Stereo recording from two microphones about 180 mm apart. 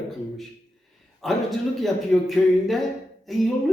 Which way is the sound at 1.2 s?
Centre (ahead or behind).